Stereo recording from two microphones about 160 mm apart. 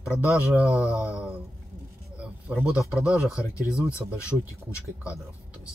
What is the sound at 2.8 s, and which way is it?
Speech, 5° right (ahead or behind).